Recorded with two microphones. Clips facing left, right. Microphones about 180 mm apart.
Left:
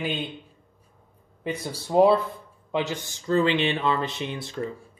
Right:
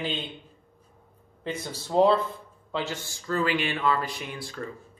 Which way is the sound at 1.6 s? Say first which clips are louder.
Left 3 dB; 10° left (ahead or behind).